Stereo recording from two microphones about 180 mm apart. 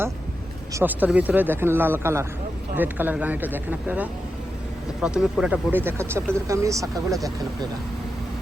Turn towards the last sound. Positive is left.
turn(degrees=0)  # may be behind; listen again after turning